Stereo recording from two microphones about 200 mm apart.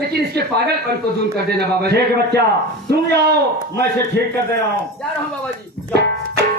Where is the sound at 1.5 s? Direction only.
55° right (ahead or behind).